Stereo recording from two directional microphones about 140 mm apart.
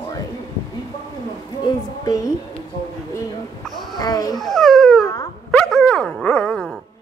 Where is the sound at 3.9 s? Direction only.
30° left (ahead or behind).